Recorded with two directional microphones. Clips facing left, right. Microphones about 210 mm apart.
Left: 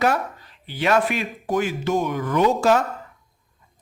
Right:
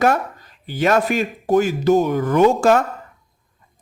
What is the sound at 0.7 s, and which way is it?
Speech, 45° right (ahead or behind).